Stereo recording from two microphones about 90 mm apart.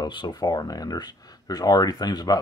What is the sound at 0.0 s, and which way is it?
Speech, 55° left (ahead or behind).